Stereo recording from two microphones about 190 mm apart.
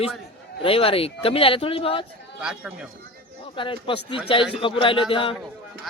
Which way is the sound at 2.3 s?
5° right (ahead or behind).